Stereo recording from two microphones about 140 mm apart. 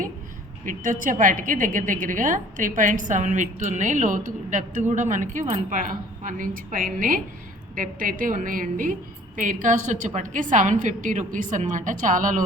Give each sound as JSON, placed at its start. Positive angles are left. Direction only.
{"t": 0.6, "sound": "a woman's voice", "side_deg": -70}